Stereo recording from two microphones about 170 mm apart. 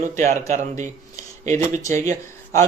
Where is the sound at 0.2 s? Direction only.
45° right (ahead or behind).